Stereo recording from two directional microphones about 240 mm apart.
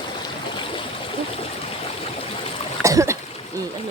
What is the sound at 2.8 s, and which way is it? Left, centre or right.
Splash, centre.